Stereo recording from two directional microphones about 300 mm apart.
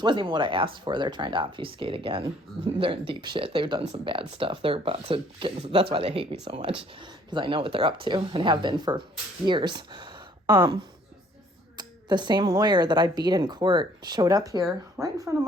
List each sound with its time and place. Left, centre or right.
0.0 s speech: centre
11.8 s speech: centre